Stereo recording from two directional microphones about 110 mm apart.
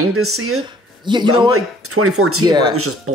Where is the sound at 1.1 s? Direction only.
45° right (ahead or behind).